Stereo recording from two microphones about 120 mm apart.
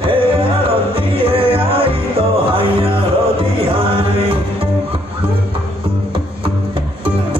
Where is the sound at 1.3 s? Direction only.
50° right (ahead or behind).